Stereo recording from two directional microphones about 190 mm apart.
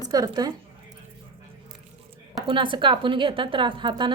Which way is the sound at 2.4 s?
25° right (ahead or behind).